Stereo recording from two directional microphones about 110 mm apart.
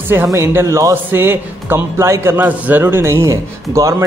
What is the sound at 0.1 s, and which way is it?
A man's voice, 25° right (ahead or behind).